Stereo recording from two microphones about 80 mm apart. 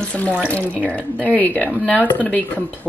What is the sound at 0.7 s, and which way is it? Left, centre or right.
Speech, right.